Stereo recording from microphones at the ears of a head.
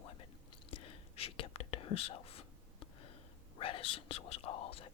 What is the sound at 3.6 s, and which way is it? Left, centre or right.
Speech, left.